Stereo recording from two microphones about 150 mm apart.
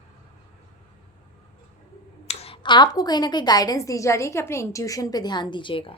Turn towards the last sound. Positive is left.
turn(degrees=35)  # may be behind; listen again after turning